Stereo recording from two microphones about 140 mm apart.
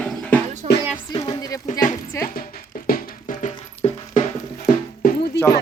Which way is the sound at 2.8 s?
80° left.